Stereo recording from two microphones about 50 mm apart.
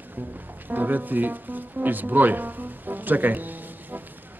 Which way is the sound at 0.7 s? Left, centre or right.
Right.